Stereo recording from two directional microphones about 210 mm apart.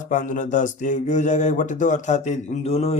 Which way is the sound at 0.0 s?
40° left (ahead or behind).